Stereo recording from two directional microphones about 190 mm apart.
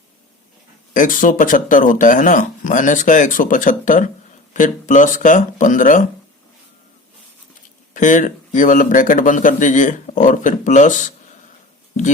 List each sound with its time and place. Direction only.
0.9 s speech: 45° left (ahead or behind)
7.9 s speech: 40° left (ahead or behind)